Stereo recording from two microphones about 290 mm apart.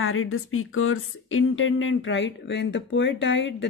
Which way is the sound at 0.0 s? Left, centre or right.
Left.